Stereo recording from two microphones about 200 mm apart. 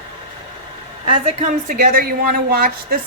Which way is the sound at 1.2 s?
40° right (ahead or behind).